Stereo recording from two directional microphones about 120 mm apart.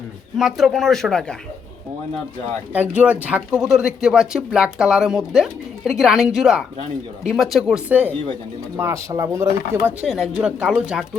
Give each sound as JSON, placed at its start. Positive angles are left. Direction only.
{"t": 0.3, "sound": "speech", "side_deg": 0}
{"t": 2.7, "sound": "speech", "side_deg": -15}
{"t": 10.1, "sound": "speech", "side_deg": 0}